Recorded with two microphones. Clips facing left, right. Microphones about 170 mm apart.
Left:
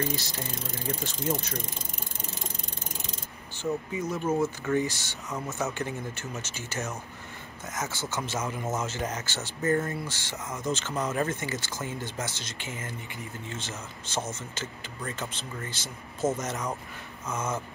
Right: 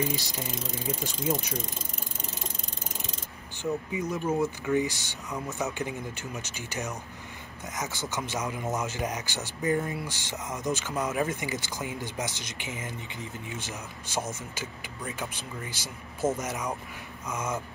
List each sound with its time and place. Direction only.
0.0 s speech: 15° right (ahead or behind)
3.9 s speech: 15° right (ahead or behind)